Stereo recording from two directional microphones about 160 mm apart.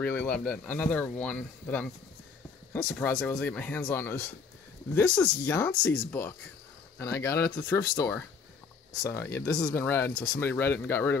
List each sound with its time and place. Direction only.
0.0 s speech: 10° left (ahead or behind)